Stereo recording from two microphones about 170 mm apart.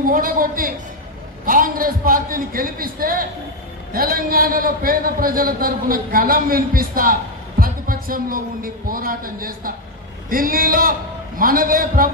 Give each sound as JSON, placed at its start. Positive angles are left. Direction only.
{"t": 0.1, "sound": "a man's voice", "side_deg": -55}